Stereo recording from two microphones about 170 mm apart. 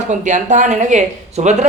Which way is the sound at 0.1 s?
45° right (ahead or behind).